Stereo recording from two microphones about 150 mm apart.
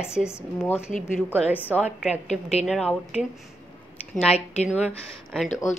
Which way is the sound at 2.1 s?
50° left (ahead or behind).